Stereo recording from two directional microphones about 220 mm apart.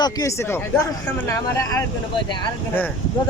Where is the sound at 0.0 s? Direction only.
15° left (ahead or behind).